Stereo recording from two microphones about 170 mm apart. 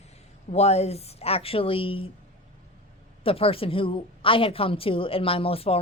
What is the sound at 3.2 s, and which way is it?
A woman's voice, 35° left (ahead or behind).